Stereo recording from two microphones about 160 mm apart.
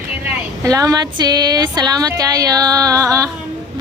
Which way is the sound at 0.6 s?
20° right (ahead or behind).